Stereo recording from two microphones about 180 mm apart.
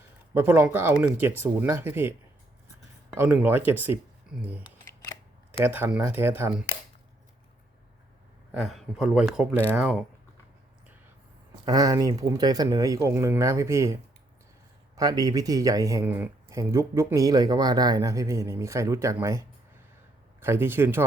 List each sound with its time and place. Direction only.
0.3 s speech: 10° right (ahead or behind)
3.2 s speech: 10° right (ahead or behind)
8.5 s speech: centre (ahead or behind)
11.6 s speech: 20° right (ahead or behind)